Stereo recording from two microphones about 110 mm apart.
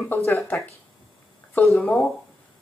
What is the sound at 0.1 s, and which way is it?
Speech, 20° left (ahead or behind).